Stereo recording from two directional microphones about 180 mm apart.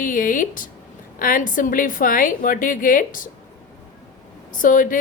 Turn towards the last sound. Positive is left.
turn(degrees=50)  # may be behind; listen again after turning